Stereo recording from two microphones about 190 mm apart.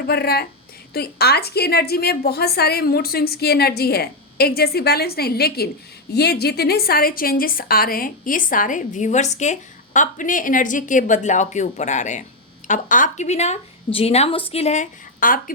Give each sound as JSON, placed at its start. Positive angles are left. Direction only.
{"t": 0.1, "sound": "a woman's voice", "side_deg": 55}